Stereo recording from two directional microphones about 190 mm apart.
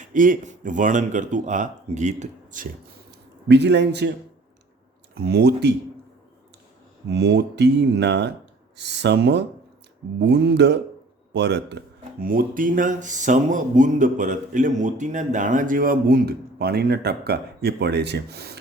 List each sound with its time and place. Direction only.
0.0 s speech: 45° right (ahead or behind)
3.1 s speech: 65° right (ahead or behind)
5.1 s speech: 55° right (ahead or behind)
7.1 s speech: 60° right (ahead or behind)
12.2 s speech: 45° right (ahead or behind)